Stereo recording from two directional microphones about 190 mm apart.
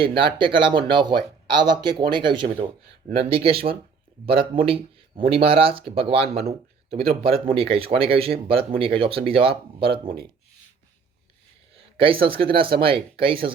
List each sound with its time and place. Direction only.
0.2 s speech: 25° right (ahead or behind)
11.7 s speech: 30° right (ahead or behind)